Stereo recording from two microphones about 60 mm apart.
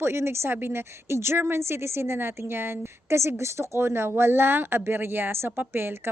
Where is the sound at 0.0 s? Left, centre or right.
Right.